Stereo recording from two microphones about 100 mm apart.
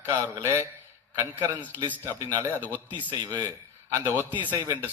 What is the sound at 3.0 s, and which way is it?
Speech, 40° right (ahead or behind).